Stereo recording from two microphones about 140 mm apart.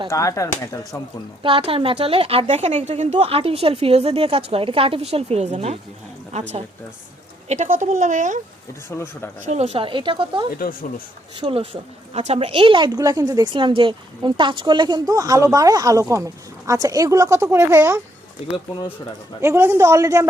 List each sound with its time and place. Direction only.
0.1 s speech: 25° left (ahead or behind)
1.4 s a woman's voice: 40° right (ahead or behind); by 8.4 s 65° right (ahead or behind)
8.9 s speech: 15° left (ahead or behind)
9.5 s a woman's voice: 50° right (ahead or behind)
10.6 s speech: 90° left
11.3 s a woman's voice: 40° right (ahead or behind); by 18.0 s 20° right (ahead or behind)
19.4 s a woman's voice: 15° right (ahead or behind)